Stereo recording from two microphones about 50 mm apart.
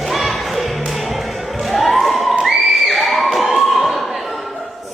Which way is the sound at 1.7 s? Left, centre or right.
Centre.